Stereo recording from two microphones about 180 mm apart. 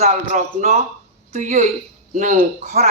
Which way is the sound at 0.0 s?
40° right (ahead or behind).